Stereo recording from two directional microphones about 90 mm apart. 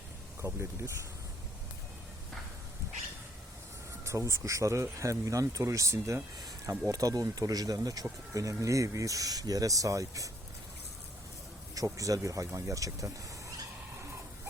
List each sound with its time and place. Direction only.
4.0 s speech: 35° right (ahead or behind)
11.7 s speech: 40° right (ahead or behind)